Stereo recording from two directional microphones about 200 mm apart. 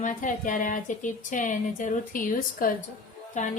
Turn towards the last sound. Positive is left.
turn(degrees=35)  # may be behind; listen again after turning